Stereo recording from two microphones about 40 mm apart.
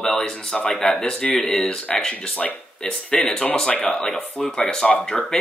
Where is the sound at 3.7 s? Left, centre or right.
Left.